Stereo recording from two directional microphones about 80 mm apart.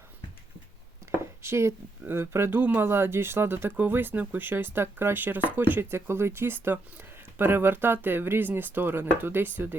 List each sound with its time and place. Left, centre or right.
1.4 s speech: right